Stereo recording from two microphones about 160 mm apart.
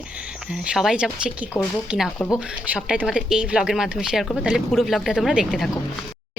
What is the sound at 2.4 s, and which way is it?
Speech, 5° right (ahead or behind).